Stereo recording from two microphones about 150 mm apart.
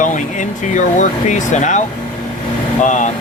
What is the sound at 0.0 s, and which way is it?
Speech, 55° left (ahead or behind).